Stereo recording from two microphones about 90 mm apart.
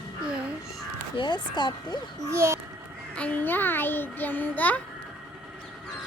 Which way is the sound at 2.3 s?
30° right (ahead or behind).